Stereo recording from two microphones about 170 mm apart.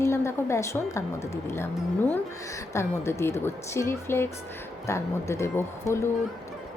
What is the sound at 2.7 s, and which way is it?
Speech, 15° left (ahead or behind).